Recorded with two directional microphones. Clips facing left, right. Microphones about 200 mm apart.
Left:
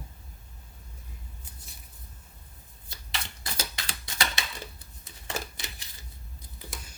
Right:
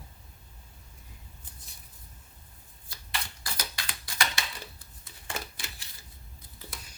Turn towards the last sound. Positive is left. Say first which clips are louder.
# left 3 dB
turn(degrees=20)  # may be behind; listen again after turning